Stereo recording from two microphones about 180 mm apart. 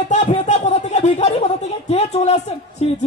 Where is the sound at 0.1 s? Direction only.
40° left (ahead or behind).